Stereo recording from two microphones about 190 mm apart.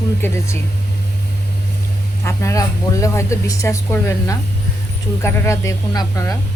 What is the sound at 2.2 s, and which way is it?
Speech, 15° left (ahead or behind).